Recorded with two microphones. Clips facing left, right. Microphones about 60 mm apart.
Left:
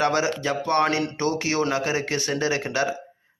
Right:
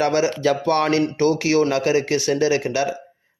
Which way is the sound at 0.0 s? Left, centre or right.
Left.